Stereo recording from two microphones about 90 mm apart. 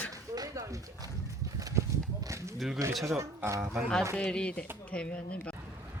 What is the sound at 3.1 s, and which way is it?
Speech, 30° right (ahead or behind).